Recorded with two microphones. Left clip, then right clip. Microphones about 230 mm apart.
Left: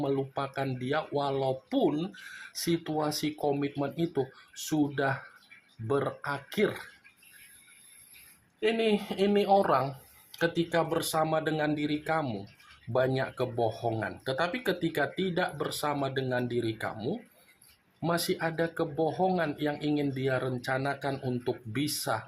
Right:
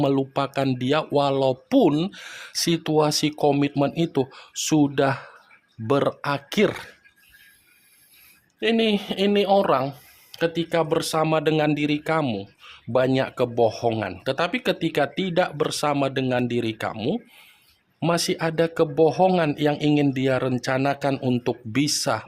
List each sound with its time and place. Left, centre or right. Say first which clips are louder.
0.0 s speech: right 9 dB; right
8.6 s speech: right 6 dB; right